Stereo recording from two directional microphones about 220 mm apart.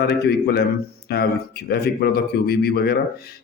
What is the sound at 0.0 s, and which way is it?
Speech, 45° left (ahead or behind).